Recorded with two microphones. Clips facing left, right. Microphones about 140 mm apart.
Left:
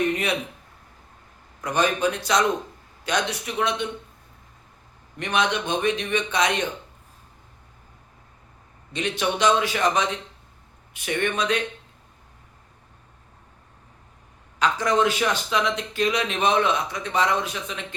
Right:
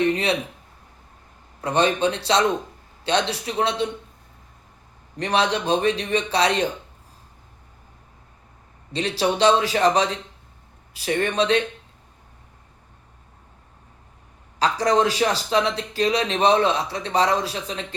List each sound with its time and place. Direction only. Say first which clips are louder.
0.1 s speech: right 3 dB; 30° right (ahead or behind)
1.6 s a man's voice: right 2 dB; 30° right (ahead or behind)
5.1 s speech: right 2 dB; 35° right (ahead or behind)
8.9 s speech: right 3 dB; 35° right (ahead or behind)
14.6 s speech: right 2 dB; 35° right (ahead or behind)